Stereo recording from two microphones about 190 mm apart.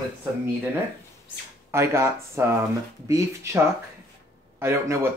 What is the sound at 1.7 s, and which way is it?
Speech, 15° right (ahead or behind).